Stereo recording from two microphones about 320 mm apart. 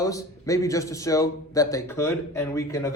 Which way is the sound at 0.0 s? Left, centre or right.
Centre.